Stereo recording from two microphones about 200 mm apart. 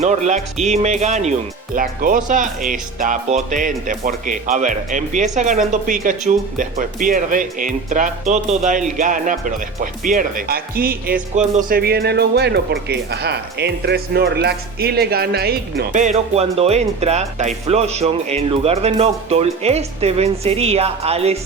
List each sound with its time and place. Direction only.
0.0 s speech: 35° right (ahead or behind)